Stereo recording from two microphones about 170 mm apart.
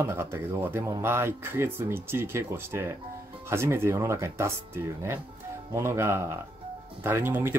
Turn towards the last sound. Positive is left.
turn(degrees=-15)  # may be behind; listen again after turning